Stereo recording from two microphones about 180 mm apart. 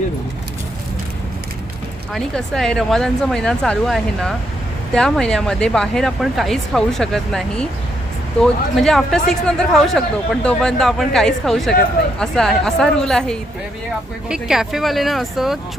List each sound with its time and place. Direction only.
2.1 s speech: 5° left (ahead or behind)